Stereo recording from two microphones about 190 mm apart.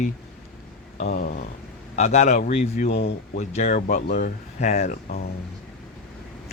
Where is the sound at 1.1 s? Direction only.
50° left (ahead or behind).